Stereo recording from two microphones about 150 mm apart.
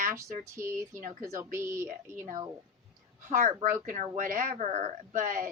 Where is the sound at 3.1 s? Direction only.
60° right (ahead or behind).